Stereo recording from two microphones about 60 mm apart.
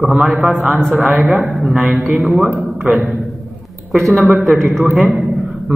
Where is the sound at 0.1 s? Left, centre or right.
Centre.